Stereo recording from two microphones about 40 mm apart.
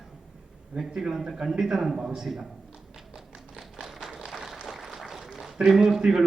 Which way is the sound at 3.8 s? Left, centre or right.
Centre.